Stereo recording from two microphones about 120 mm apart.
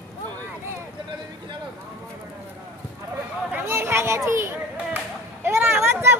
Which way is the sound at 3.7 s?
20° right (ahead or behind).